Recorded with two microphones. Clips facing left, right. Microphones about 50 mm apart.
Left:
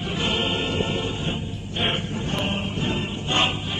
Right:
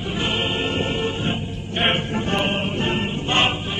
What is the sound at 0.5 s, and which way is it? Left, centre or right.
Music, right.